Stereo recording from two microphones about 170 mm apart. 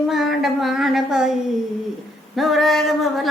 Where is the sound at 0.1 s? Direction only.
Centre (ahead or behind).